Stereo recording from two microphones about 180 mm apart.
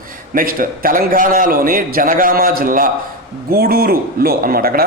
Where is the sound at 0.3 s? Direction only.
50° right (ahead or behind).